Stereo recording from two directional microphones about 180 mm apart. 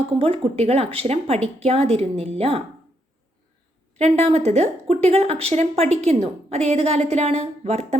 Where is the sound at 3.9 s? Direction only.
35° right (ahead or behind).